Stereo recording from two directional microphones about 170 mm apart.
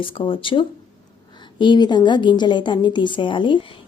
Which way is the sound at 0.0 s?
30° left (ahead or behind).